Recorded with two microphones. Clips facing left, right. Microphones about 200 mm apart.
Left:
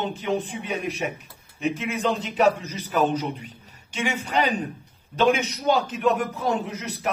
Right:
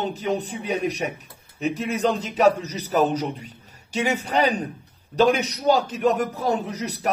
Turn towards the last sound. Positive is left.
turn(degrees=-40)  # may be behind; listen again after turning